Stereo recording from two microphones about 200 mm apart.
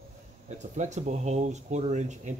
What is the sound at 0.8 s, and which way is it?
Speech, 35° right (ahead or behind).